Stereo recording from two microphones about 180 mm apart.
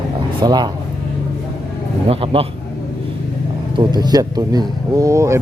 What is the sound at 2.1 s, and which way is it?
Speech, 30° right (ahead or behind).